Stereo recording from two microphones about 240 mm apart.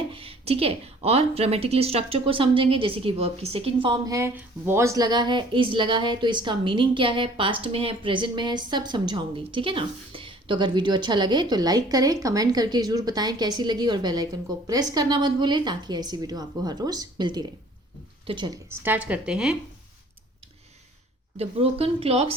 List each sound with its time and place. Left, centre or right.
0.1 s a woman's voice: right; by 19.5 s centre
21.3 s a woman's voice: right